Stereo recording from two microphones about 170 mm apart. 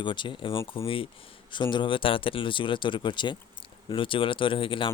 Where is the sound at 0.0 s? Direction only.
30° left (ahead or behind).